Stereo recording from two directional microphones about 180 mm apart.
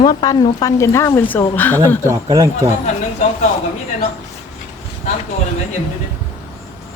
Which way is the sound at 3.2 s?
40° left (ahead or behind).